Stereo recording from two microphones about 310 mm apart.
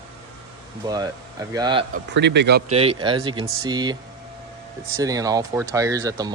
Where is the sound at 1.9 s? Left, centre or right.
Right.